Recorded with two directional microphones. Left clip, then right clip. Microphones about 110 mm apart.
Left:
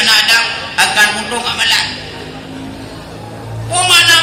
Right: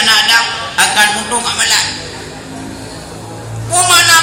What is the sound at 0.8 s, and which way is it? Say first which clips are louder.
Speech: even; 25° left (ahead or behind).